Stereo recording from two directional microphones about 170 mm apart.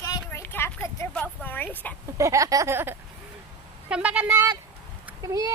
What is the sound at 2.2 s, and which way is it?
Speech, 20° right (ahead or behind).